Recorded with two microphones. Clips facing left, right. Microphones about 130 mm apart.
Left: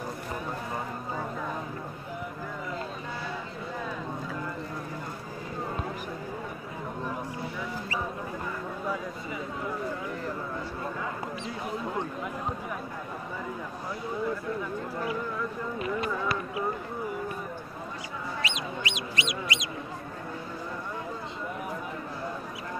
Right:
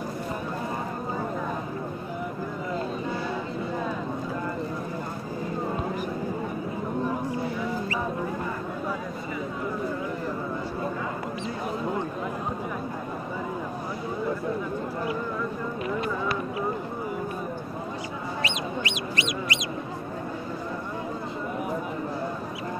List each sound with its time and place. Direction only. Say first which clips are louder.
18.4 s fowl: right 5 dB; 55° right (ahead or behind)